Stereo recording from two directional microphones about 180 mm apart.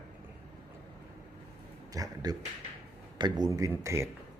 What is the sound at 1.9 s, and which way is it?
Speech, 20° right (ahead or behind).